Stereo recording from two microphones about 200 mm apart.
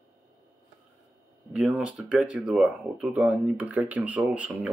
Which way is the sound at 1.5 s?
5° right (ahead or behind).